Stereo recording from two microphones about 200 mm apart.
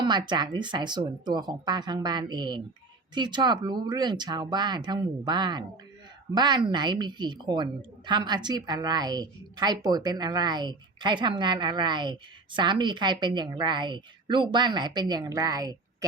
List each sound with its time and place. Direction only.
0.0 s a woman's voice: 20° right (ahead or behind)